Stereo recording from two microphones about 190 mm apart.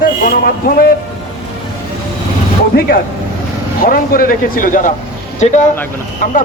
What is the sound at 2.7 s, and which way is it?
A man's voice, 50° left (ahead or behind).